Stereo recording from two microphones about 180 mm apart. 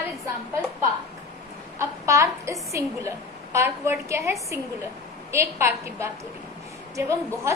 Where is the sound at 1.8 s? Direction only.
15° right (ahead or behind).